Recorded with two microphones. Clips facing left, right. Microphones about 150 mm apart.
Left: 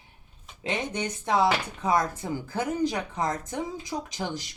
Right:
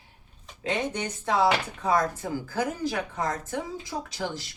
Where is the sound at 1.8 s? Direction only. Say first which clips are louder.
Even; 20° left (ahead or behind).